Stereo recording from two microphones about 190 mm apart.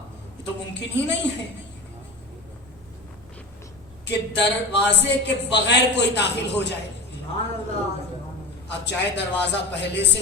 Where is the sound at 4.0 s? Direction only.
65° left (ahead or behind).